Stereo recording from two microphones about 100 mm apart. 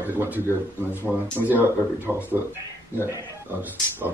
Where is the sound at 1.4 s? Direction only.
20° right (ahead or behind).